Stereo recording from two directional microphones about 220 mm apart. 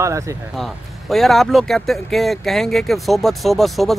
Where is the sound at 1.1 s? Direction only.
Centre (ahead or behind).